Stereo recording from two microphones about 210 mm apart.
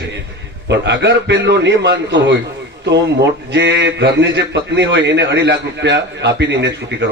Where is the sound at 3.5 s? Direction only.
55° right (ahead or behind).